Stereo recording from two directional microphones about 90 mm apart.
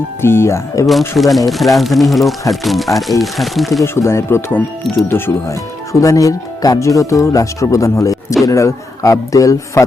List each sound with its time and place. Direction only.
0.2 s speech: 25° left (ahead or behind)
0.9 s speech: centre (ahead or behind)
3.8 s speech: 30° left (ahead or behind)